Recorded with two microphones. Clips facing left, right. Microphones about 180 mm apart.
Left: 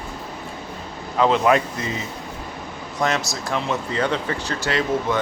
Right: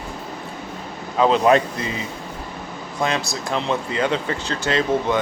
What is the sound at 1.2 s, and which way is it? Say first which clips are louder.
Speech: right 2 dB; 25° right (ahead or behind).